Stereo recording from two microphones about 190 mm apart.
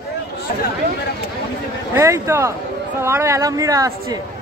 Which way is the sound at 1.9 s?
15° right (ahead or behind).